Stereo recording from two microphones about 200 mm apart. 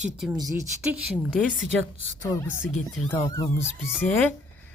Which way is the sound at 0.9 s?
5° right (ahead or behind).